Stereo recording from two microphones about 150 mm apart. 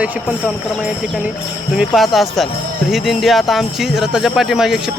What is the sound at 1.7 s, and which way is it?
Speech, centre (ahead or behind).